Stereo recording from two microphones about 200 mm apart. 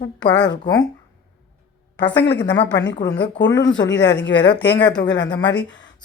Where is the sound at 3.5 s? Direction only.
20° left (ahead or behind).